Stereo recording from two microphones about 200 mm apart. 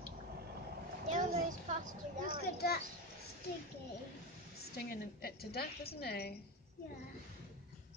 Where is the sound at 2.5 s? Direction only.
50° left (ahead or behind).